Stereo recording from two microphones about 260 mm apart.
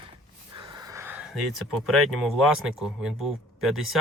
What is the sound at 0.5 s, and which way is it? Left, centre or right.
Speech, centre.